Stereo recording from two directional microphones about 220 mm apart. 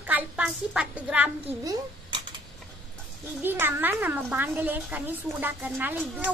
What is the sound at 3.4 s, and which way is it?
A woman's voice, 10° right (ahead or behind).